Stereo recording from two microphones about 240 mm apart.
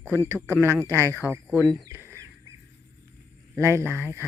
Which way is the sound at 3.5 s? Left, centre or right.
Centre.